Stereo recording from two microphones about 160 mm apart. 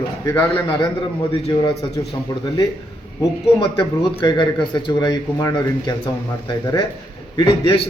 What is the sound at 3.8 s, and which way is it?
Speech, 30° left (ahead or behind).